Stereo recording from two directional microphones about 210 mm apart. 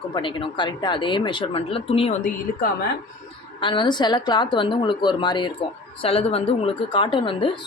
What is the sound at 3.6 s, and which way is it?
Speech, 25° left (ahead or behind).